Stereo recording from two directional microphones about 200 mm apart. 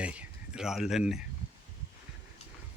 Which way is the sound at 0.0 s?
5° right (ahead or behind).